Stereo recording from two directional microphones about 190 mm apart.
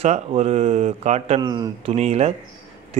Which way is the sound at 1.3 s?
20° right (ahead or behind).